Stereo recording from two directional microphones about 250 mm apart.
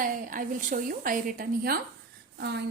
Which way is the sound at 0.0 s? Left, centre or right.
Right.